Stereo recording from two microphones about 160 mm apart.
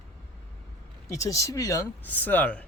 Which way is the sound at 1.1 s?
20° left (ahead or behind).